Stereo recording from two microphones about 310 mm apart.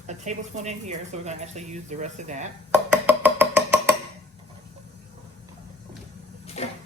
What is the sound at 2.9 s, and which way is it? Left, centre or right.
Music, centre.